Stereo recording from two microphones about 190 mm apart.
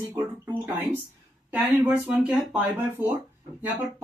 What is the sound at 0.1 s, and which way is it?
Speech, 15° right (ahead or behind).